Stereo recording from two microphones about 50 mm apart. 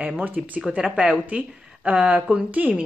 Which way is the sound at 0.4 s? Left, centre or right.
Centre.